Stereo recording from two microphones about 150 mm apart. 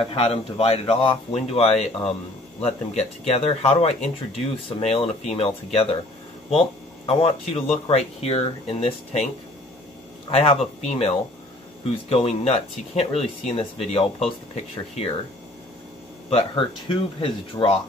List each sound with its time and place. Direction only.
0.0 s speech: 40° left (ahead or behind)
7.1 s speech: 40° left (ahead or behind)
10.3 s speech: 40° left (ahead or behind)
16.3 s speech: 40° left (ahead or behind)